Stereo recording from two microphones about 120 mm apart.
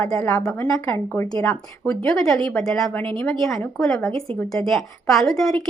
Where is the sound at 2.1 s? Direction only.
Centre (ahead or behind).